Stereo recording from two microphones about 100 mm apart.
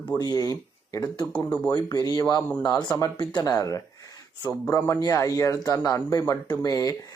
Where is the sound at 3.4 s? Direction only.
40° left (ahead or behind).